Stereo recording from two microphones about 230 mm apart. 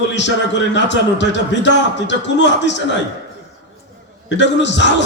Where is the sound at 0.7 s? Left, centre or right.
Left.